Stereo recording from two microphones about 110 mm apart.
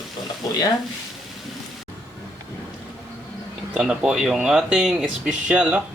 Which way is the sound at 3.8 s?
5° right (ahead or behind).